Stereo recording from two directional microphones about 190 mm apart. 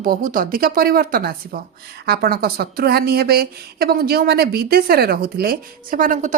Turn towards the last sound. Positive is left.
turn(degrees=-40)  # may be behind; listen again after turning